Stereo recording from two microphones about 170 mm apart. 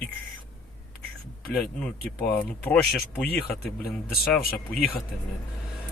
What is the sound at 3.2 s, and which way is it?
Speech, 70° left (ahead or behind).